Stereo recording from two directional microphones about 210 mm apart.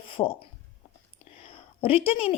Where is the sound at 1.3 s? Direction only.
25° left (ahead or behind).